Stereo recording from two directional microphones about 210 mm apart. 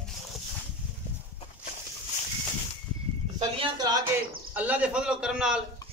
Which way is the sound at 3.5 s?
20° right (ahead or behind).